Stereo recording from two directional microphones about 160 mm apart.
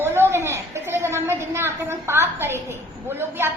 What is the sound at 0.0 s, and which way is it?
A woman's voice, 15° right (ahead or behind).